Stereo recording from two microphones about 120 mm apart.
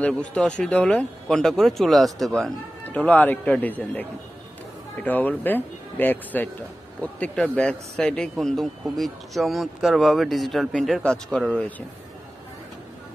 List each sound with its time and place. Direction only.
0.0 s speech: 10° left (ahead or behind)